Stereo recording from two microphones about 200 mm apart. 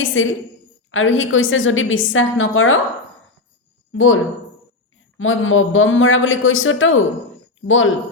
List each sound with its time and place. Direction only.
0.0 s a woman's voice: 75° left (ahead or behind)
3.9 s a woman's voice: 80° left